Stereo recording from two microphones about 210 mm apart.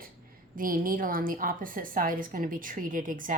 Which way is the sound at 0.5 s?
40° right (ahead or behind).